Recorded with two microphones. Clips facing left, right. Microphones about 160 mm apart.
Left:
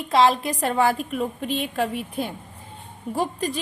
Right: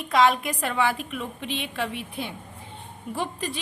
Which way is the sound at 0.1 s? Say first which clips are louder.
Left 2 dB; 30° left (ahead or behind).